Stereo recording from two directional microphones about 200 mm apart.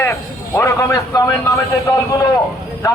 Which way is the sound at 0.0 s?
10° left (ahead or behind).